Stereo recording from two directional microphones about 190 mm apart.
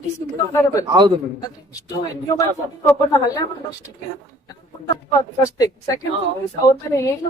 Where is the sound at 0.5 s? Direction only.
15° left (ahead or behind).